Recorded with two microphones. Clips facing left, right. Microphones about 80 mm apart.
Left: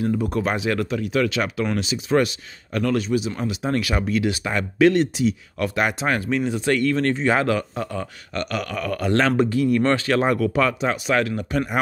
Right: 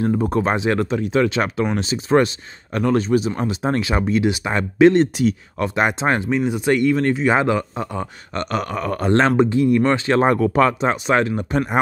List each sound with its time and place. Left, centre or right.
0.0 s speech: right; by 10.0 s centre
10.0 s speech: right